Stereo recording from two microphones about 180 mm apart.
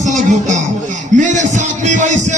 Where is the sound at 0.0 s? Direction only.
40° right (ahead or behind).